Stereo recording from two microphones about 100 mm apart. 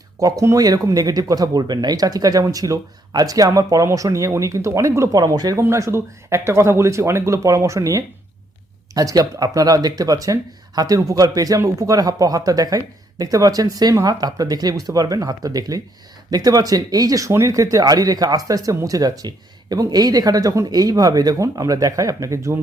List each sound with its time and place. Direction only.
0.2 s speech: 35° right (ahead or behind)
5.6 s speech: 30° right (ahead or behind)